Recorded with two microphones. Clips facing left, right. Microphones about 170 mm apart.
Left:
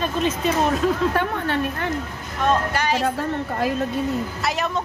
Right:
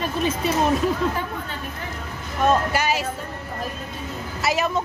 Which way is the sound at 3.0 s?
80° left.